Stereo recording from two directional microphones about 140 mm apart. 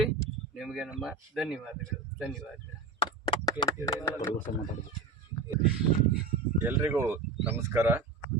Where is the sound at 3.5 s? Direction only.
25° left (ahead or behind).